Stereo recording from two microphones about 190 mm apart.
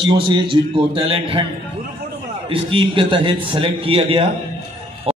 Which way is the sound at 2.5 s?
30° right (ahead or behind).